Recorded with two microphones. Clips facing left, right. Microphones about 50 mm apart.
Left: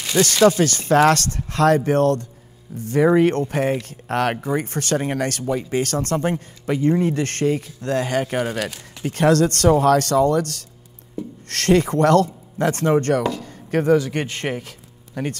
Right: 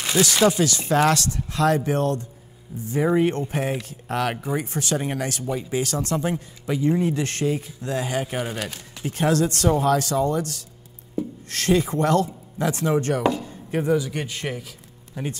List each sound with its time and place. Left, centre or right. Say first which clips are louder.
0.1 s chopping: left 3 dB; centre
0.6 s speech: left 4 dB; left
13.2 s speech: right 1 dB; centre
13.5 s a sound: left 5 dB; left
14.1 s speech: left 4 dB; centre